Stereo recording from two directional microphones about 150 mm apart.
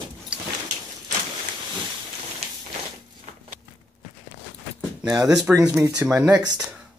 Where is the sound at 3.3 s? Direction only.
50° right (ahead or behind).